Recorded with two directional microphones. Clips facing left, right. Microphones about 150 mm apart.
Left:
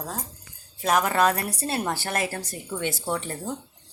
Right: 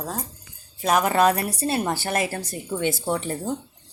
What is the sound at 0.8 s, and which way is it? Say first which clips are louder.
Speech: right 2 dB; 5° right (ahead or behind).